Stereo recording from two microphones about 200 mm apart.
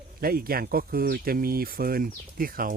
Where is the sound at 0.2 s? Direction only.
45° right (ahead or behind).